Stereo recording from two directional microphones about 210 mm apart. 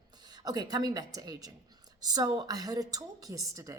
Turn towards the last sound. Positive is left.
turn(degrees=-15)  # may be behind; listen again after turning